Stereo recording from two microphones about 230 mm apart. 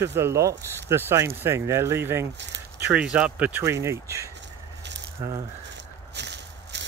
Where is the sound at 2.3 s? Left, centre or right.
Right.